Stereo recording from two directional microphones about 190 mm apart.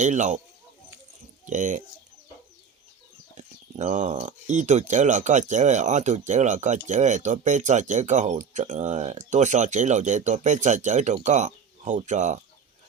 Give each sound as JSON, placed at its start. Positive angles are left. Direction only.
{"t": 0.0, "sound": "speech", "side_deg": -40}
{"t": 1.5, "sound": "speech", "side_deg": -40}
{"t": 3.3, "sound": "speech", "side_deg": -40}